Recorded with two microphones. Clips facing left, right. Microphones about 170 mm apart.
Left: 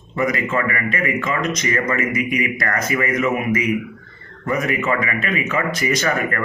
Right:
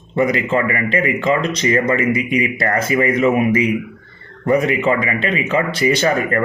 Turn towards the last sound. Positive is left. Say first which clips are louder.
# right 4 dB
turn(degrees=-30)  # may be behind; listen again after turning